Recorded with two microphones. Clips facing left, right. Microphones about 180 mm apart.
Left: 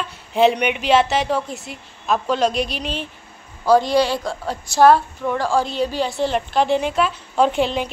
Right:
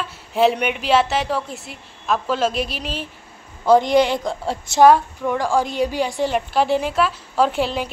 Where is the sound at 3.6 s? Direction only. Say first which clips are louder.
Right 1 dB; 20° right (ahead or behind).